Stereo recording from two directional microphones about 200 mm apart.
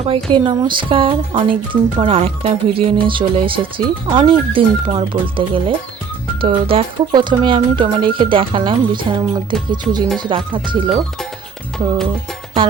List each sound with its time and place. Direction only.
0.0 s speech: 25° right (ahead or behind)